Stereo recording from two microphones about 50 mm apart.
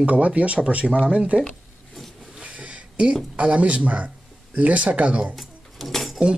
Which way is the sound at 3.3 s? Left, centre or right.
Right.